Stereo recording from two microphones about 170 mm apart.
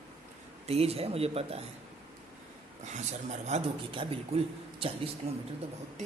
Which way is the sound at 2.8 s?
45° right (ahead or behind).